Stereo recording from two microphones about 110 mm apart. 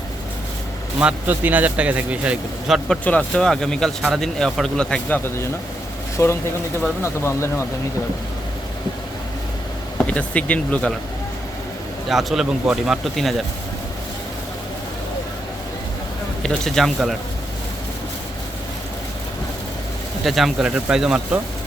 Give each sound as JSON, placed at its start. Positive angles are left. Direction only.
{"t": 0.9, "sound": "speech", "side_deg": -15}
{"t": 3.0, "sound": "speech", "side_deg": 15}
{"t": 10.0, "sound": "speech", "side_deg": 10}
{"t": 12.0, "sound": "speech", "side_deg": 0}
{"t": 16.4, "sound": "speech", "side_deg": 5}
{"t": 20.2, "sound": "speech", "side_deg": 0}